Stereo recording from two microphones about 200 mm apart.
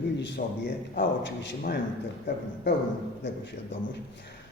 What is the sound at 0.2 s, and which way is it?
A man's voice, 60° left (ahead or behind).